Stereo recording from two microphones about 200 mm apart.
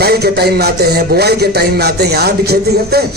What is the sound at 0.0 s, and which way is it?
A man's voice, 55° right (ahead or behind).